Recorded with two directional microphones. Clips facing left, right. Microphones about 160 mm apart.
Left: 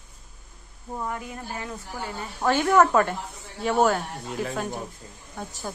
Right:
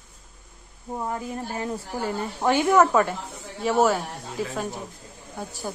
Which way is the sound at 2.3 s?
15° right (ahead or behind).